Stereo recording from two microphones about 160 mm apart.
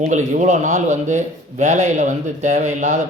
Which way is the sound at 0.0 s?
50° right (ahead or behind).